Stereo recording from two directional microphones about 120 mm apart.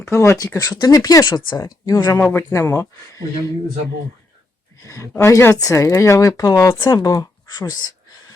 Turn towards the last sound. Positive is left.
turn(degrees=35)  # may be behind; listen again after turning